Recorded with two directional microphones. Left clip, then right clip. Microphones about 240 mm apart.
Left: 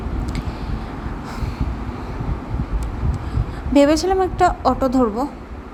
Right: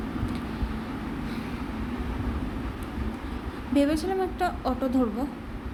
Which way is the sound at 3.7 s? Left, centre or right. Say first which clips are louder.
Left 10 dB; left.